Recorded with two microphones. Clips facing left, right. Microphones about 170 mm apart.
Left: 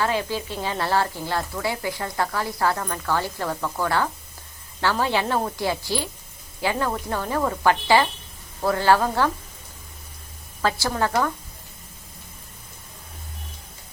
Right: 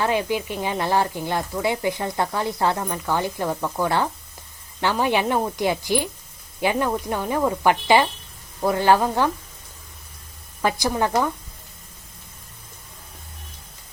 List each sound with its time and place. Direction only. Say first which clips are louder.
0.0 s speech: right 2 dB; 20° right (ahead or behind)
10.6 s speech: right 2 dB; 15° right (ahead or behind)